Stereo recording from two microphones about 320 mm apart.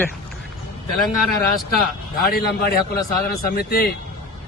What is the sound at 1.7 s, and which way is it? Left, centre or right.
A man's voice, left.